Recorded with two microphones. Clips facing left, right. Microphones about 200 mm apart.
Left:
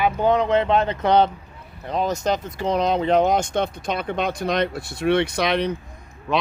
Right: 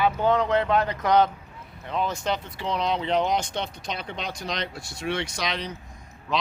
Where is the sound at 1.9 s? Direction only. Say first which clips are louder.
Left 5 dB; 40° left (ahead or behind); by 5.7 s 60° left (ahead or behind).